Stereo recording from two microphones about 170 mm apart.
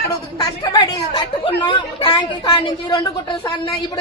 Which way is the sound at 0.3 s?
20° left (ahead or behind).